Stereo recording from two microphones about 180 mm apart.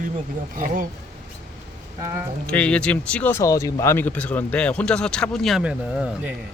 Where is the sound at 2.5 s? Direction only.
5° left (ahead or behind).